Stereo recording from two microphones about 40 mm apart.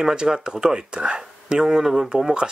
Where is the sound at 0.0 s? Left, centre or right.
Centre.